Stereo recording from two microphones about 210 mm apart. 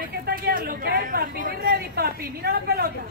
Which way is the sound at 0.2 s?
45° right (ahead or behind).